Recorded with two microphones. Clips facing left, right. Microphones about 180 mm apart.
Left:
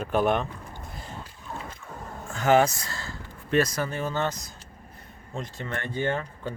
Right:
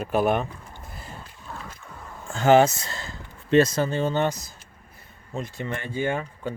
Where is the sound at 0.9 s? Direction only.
5° right (ahead or behind).